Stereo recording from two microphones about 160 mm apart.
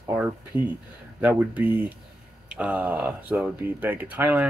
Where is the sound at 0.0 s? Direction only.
10° right (ahead or behind).